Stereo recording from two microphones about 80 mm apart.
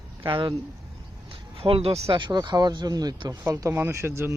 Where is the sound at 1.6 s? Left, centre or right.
Right.